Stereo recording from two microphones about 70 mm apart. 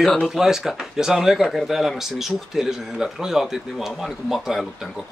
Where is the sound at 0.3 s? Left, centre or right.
Centre.